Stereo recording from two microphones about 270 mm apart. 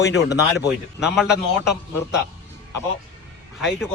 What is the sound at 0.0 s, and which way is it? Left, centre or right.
Speech, left.